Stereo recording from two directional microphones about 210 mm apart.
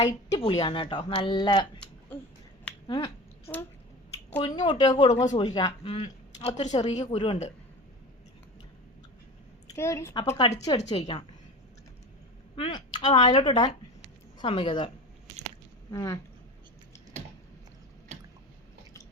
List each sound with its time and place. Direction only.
0.0 s speech: 20° left (ahead or behind)
2.8 s finger snapping: 25° left (ahead or behind)
4.3 s speech: 25° left (ahead or behind)
5.1 s speech: 35° left (ahead or behind)
5.4 s speech: 20° left (ahead or behind)
9.7 s speech: 15° left (ahead or behind)
10.8 s speech: 35° left (ahead or behind)
12.5 s speech: 25° left (ahead or behind)
15.9 s speech: 15° left (ahead or behind)